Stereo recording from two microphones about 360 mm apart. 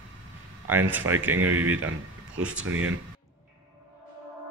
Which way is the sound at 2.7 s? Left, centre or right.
Right.